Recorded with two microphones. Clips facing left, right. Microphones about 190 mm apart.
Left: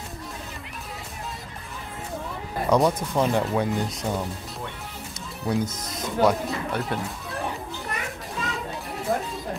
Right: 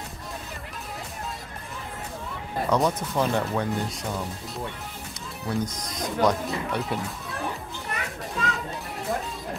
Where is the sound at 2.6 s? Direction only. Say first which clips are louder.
Left 3 dB; 15° left (ahead or behind).